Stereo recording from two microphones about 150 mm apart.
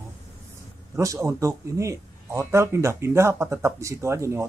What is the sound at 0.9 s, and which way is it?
A man's voice, 20° right (ahead or behind).